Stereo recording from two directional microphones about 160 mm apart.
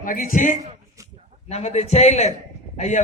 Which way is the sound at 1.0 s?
20° right (ahead or behind).